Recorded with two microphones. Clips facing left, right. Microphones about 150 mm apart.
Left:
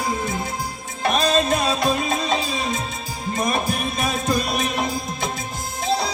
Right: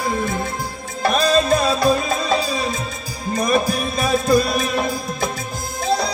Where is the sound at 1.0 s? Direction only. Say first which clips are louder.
Right 3 dB; 35° right (ahead or behind).